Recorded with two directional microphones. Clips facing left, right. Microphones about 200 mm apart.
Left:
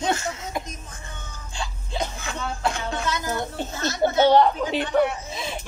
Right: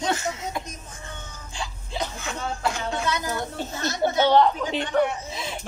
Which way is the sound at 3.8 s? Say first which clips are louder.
Left 2 dB; 20° left (ahead or behind).